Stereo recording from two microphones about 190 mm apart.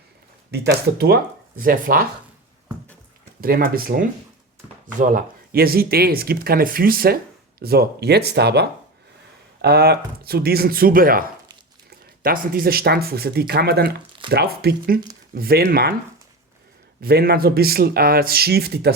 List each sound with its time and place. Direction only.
0.5 s speech: 55° right (ahead or behind)
3.4 s speech: 50° right (ahead or behind)
17.0 s speech: 55° right (ahead or behind)